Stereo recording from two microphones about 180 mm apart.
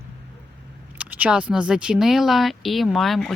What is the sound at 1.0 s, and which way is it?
Speech, 10° right (ahead or behind).